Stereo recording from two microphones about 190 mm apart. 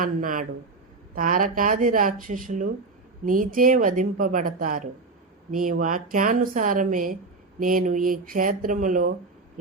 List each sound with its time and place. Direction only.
0.0 s speech: 45° right (ahead or behind)